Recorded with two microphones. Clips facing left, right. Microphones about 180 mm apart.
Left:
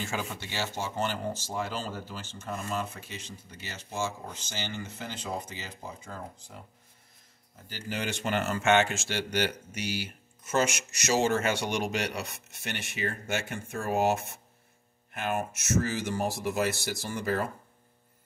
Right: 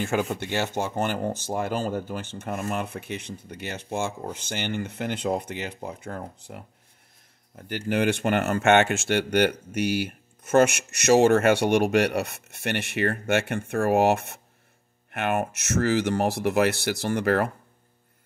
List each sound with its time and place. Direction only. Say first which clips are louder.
0.0 s speech: right 9 dB; 50° right (ahead or behind); by 17.5 s 70° right (ahead or behind)